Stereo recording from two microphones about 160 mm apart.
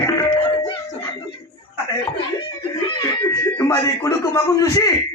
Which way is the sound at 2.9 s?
25° left (ahead or behind).